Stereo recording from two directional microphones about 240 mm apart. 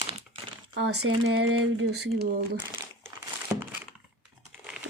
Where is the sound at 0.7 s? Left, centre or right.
Right.